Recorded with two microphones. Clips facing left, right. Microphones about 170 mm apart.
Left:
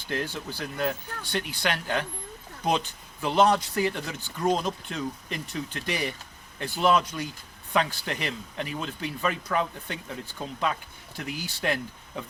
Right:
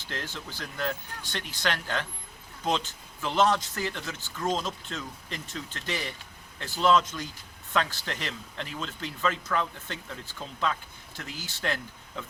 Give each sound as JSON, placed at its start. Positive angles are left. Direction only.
{"t": 0.1, "sound": "a man's voice", "side_deg": 10}